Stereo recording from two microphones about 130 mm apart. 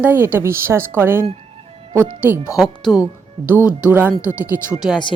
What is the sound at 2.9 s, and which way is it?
Speech, 10° right (ahead or behind).